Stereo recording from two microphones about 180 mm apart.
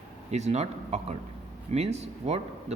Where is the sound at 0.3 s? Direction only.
40° right (ahead or behind).